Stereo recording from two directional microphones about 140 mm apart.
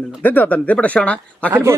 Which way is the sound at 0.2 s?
10° left (ahead or behind).